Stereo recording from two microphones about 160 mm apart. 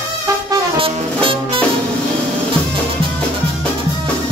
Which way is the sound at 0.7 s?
35° right (ahead or behind).